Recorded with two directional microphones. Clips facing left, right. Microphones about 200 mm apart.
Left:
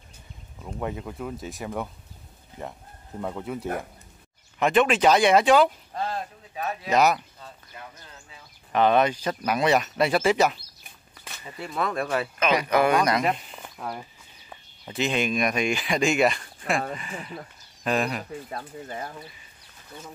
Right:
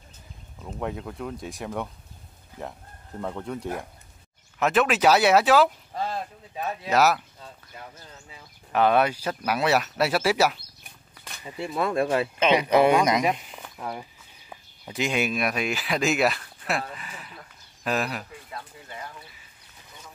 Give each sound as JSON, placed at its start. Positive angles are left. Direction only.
{"t": 0.7, "sound": "speech", "side_deg": 0}
{"t": 8.7, "sound": "speech", "side_deg": -10}
{"t": 10.8, "sound": "bird flight", "side_deg": 0}
{"t": 11.7, "sound": "speech", "side_deg": -25}
{"t": 13.6, "sound": "a sound", "side_deg": -5}
{"t": 14.5, "sound": "speech", "side_deg": -10}
{"t": 17.1, "sound": "speech", "side_deg": 50}
{"t": 17.8, "sound": "speech", "side_deg": -5}
{"t": 18.5, "sound": "speech", "side_deg": 45}